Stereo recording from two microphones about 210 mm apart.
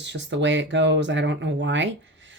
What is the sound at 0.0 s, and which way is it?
Speech, 55° right (ahead or behind).